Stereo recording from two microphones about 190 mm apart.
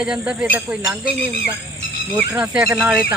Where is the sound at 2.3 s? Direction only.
5° right (ahead or behind).